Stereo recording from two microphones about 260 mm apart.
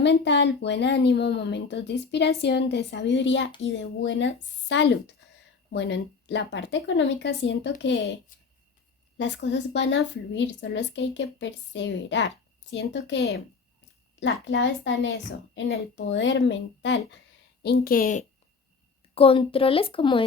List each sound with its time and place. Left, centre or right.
0.0 s a woman's voice: left
9.1 s a woman's voice: left; by 20.2 s centre